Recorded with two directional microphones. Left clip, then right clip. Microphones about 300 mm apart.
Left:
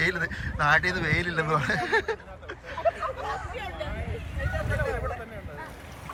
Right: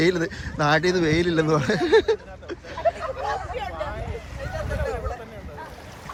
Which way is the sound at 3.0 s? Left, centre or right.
Right.